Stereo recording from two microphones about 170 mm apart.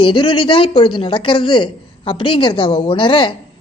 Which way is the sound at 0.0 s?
30° left (ahead or behind).